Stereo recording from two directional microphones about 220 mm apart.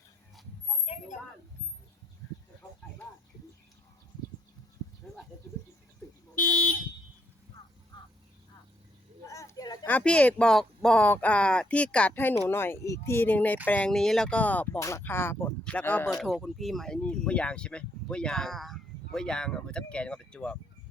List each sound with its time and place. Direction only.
7.9 s vehicle: 20° left (ahead or behind)
9.2 s speech: 15° left (ahead or behind)